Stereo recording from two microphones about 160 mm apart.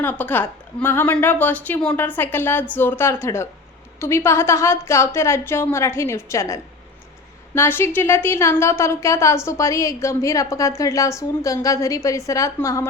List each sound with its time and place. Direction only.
0.0 s a woman's voice: 10° left (ahead or behind)